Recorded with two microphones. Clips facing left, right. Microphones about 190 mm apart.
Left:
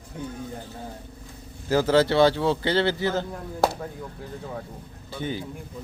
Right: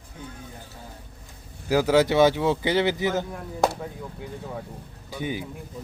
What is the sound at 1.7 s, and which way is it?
Speech, 10° right (ahead or behind).